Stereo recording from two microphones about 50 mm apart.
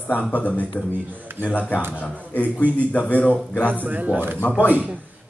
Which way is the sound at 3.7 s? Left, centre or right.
Right.